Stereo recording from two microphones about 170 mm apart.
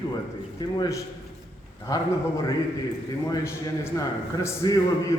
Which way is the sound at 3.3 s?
20° left (ahead or behind).